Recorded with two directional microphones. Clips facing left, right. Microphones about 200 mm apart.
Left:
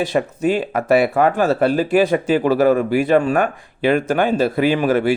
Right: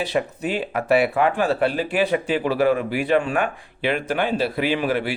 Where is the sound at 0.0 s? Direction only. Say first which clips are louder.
Left 5 dB; 45° left (ahead or behind).